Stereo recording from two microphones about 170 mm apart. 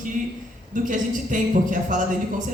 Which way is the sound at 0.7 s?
50° right (ahead or behind).